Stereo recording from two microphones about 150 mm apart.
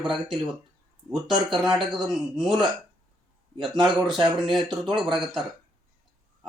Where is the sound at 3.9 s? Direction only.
Centre (ahead or behind).